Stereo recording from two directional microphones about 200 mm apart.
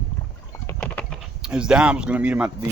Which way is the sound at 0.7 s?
10° left (ahead or behind).